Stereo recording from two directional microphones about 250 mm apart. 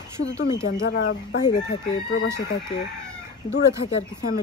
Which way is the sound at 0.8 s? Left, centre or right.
Left.